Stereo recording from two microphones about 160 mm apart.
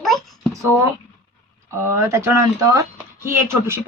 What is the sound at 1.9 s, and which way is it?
Speech, 15° right (ahead or behind).